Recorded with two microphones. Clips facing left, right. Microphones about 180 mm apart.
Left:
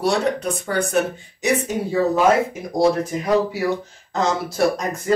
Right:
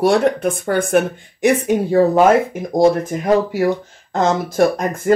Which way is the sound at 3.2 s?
50° right (ahead or behind).